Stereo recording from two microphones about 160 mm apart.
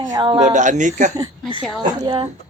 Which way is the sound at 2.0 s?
30° right (ahead or behind).